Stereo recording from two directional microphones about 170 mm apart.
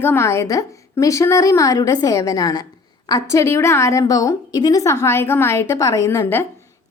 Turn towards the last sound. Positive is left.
turn(degrees=15)  # may be behind; listen again after turning